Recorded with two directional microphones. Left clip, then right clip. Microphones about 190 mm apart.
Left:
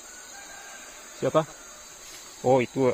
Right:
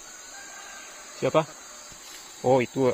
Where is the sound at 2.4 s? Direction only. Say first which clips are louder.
Even; 15° right (ahead or behind).